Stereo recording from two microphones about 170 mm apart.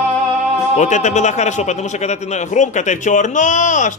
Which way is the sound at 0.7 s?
45° left (ahead or behind).